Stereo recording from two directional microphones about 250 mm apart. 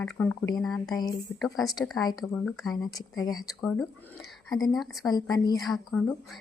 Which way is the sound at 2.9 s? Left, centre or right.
Centre.